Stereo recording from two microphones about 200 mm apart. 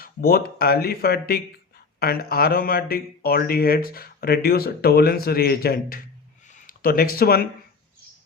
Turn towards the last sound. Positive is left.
turn(degrees=50)  # may be behind; listen again after turning